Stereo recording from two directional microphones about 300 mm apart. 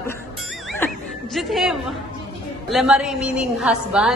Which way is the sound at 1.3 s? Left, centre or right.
Centre.